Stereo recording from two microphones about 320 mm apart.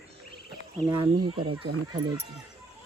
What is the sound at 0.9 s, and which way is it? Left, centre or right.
Speech, centre.